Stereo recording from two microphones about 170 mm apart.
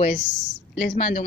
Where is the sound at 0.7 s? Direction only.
60° left (ahead or behind).